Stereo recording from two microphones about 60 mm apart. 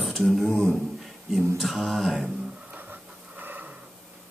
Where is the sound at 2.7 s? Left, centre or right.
Right.